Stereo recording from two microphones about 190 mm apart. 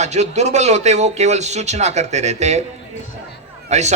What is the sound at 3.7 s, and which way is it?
Speech, 35° right (ahead or behind).